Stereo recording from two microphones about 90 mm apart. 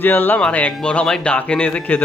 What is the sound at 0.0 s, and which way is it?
Speech, 25° left (ahead or behind).